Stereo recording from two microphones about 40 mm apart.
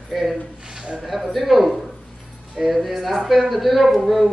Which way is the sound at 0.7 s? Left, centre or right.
Right.